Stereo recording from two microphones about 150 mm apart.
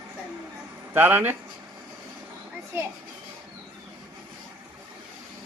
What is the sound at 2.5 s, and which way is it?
Children playing, 15° right (ahead or behind).